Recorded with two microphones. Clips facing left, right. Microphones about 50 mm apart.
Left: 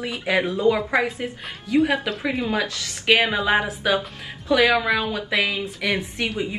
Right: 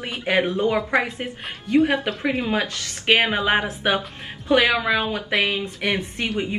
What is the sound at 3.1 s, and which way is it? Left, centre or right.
Speech, right.